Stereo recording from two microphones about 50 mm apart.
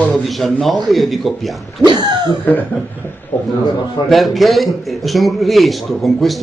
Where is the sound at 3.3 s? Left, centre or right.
Left.